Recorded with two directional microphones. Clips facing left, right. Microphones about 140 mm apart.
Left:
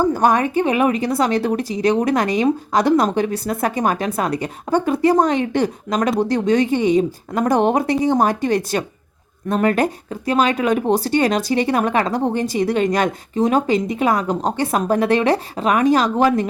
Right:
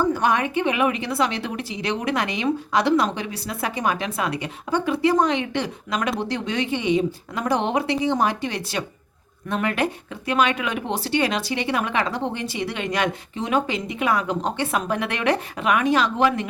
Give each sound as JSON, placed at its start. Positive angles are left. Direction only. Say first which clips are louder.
{"t": 0.0, "sound": "a woman's voice", "louder": "left 5 dB", "side_deg": 40}